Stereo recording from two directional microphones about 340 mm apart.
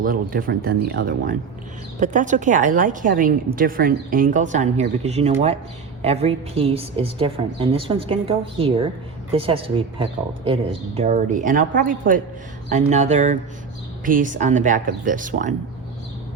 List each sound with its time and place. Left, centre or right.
0.0 s a woman's voice: right